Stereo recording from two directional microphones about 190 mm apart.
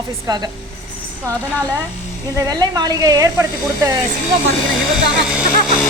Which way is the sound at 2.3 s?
20° right (ahead or behind).